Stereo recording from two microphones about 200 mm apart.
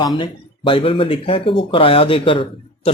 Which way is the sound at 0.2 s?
25° left (ahead or behind).